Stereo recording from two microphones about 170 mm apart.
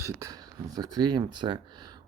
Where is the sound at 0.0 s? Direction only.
20° right (ahead or behind).